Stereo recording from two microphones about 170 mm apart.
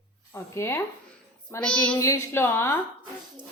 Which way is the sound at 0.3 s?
15° left (ahead or behind).